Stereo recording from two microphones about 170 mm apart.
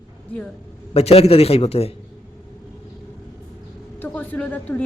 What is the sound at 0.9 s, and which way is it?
A man's voice, 35° left (ahead or behind).